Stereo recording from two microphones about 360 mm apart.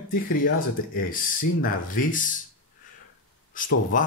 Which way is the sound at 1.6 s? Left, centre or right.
Left.